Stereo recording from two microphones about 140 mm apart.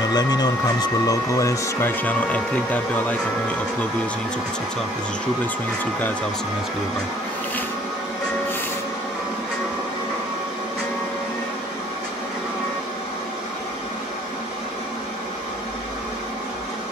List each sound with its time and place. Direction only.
0.0 s speech: 30° left (ahead or behind); by 3.2 s 10° left (ahead or behind)